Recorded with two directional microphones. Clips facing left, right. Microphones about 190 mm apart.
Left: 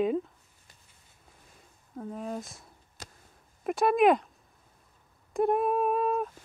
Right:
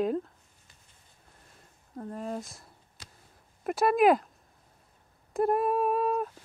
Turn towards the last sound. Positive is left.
turn(degrees=0)  # may be behind; listen again after turning